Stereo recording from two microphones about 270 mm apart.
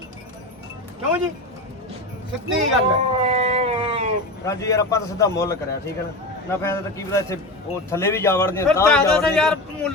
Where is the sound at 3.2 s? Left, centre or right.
Right.